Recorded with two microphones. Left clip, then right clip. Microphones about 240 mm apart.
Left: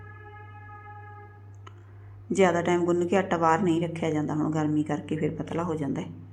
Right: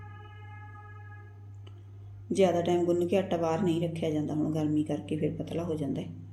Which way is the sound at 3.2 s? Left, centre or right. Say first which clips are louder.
Left 6 dB; left.